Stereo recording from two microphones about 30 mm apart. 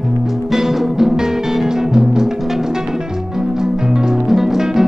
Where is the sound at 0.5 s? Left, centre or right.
Centre.